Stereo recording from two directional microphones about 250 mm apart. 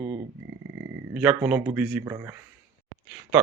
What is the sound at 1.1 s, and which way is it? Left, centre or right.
Speech, centre.